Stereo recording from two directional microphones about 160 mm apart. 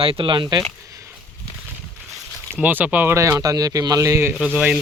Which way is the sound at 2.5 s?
10° right (ahead or behind).